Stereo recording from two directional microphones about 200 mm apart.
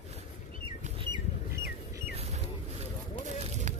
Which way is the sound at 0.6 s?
25° right (ahead or behind).